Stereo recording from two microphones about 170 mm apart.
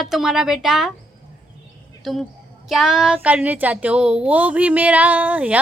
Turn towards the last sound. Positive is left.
turn(degrees=-10)  # may be behind; listen again after turning